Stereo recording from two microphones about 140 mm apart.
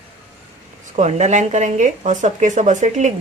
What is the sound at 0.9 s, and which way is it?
Speech, 60° right (ahead or behind).